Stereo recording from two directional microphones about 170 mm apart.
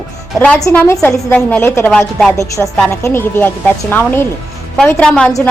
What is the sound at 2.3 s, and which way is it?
A woman's voice, 20° left (ahead or behind).